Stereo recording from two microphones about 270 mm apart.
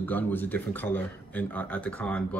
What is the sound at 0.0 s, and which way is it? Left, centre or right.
Speech, centre.